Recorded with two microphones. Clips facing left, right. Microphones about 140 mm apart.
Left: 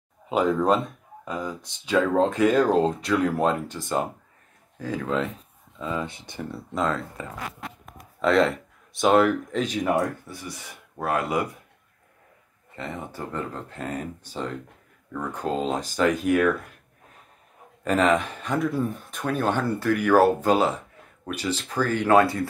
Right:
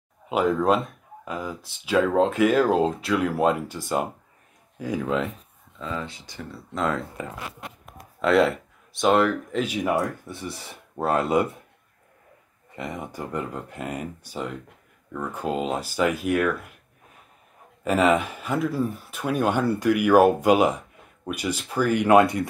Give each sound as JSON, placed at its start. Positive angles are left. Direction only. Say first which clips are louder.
{"t": 0.3, "sound": "speech", "louder": "even", "side_deg": 0}
{"t": 6.0, "sound": "speech", "louder": "left 2 dB", "side_deg": 55}
{"t": 7.8, "sound": "a sound", "louder": "left 1 dB", "side_deg": -5}
{"t": 10.2, "sound": "speech", "louder": "right 3 dB", "side_deg": -25}
{"t": 12.7, "sound": "speech", "louder": "right 1 dB", "side_deg": -15}
{"t": 17.8, "sound": "speech", "louder": "right 1 dB", "side_deg": -10}